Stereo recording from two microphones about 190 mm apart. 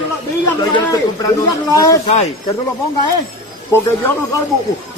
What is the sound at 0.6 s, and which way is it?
Speech, 20° left (ahead or behind).